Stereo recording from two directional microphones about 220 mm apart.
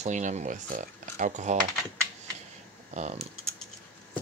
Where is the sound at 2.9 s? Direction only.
30° right (ahead or behind).